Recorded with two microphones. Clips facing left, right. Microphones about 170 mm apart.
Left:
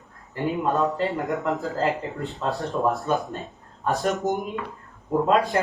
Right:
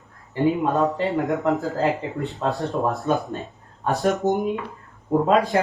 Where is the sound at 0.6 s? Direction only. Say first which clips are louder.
Right 2 dB; centre (ahead or behind).